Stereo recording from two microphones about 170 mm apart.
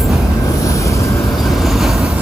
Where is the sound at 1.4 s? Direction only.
Centre (ahead or behind).